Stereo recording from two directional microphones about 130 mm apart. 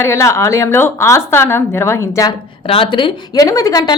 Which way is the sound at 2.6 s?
45° left (ahead or behind).